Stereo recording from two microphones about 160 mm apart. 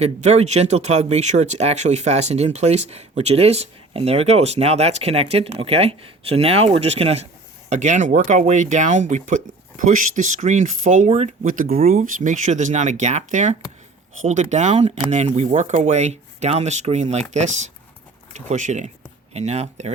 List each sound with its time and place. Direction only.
0.0 s speech: 45° right (ahead or behind)
18.4 s speech: 50° right (ahead or behind)